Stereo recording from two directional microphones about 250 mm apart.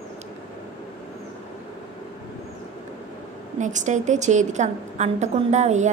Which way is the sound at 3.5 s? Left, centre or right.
Right.